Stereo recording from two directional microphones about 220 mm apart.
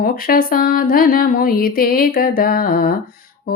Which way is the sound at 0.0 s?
40° left (ahead or behind).